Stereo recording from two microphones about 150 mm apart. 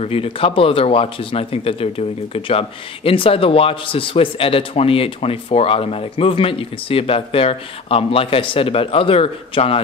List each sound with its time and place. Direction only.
0.0 s speech: 40° left (ahead or behind)